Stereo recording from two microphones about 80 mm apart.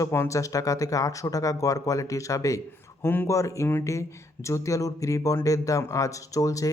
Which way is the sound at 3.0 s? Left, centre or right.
Left.